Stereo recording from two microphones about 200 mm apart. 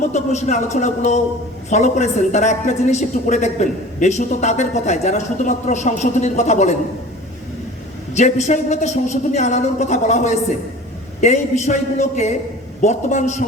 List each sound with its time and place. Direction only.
0.0 s a woman's voice: 35° left (ahead or behind)
8.1 s a woman's voice: 35° left (ahead or behind)